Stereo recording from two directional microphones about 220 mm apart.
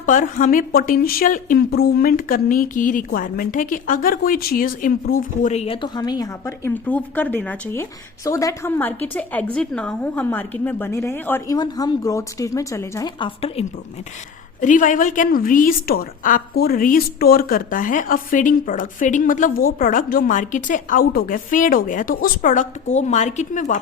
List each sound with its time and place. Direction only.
0.0 s a woman's voice: 35° left (ahead or behind)
14.6 s a woman's voice: 35° left (ahead or behind)